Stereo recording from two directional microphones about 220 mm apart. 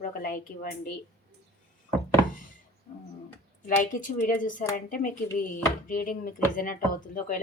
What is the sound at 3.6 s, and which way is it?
Speech, 35° left (ahead or behind).